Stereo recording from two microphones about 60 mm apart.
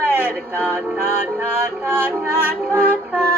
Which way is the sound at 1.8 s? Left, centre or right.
Right.